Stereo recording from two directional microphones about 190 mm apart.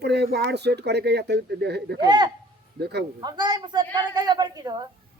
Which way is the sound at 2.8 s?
60° right (ahead or behind).